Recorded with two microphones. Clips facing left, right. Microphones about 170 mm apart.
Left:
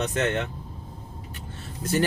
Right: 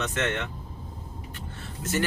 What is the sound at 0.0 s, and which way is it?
Speech, 35° left (ahead or behind).